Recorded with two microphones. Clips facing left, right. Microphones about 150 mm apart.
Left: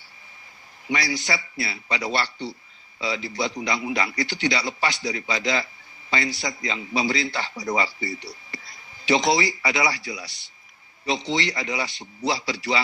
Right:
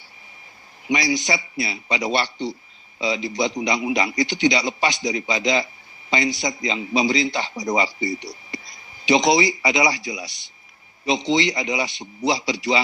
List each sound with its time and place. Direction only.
0.9 s a man's voice: 15° right (ahead or behind)